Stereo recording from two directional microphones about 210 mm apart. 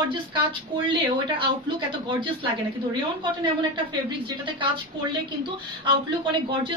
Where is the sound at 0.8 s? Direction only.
25° right (ahead or behind).